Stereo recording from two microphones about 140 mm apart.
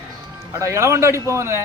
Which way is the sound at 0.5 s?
20° right (ahead or behind).